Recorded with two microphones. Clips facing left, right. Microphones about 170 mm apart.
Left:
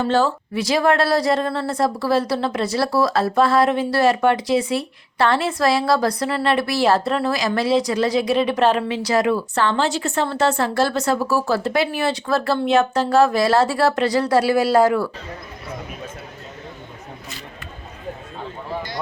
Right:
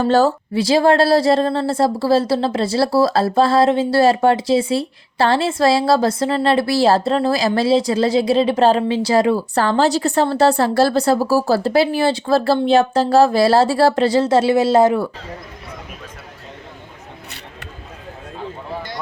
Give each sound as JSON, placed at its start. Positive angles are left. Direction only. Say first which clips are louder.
{"t": 0.0, "sound": "speech", "louder": "right 4 dB", "side_deg": -40}